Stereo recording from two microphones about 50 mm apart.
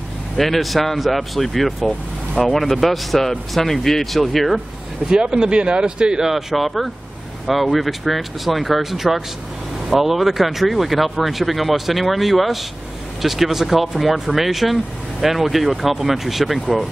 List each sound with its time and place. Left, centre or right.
0.4 s speech: centre
5.0 s speech: centre
6.3 s speech: centre